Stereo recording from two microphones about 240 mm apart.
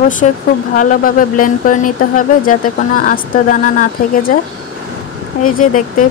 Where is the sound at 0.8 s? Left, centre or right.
Left.